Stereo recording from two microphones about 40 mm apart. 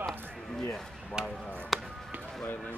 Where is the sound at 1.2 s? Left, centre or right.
Left.